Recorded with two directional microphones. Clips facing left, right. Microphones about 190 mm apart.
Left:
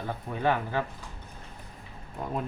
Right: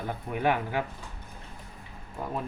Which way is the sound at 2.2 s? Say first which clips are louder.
Even; 5° right (ahead or behind).